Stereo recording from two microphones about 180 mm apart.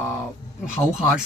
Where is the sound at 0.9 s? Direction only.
5° right (ahead or behind).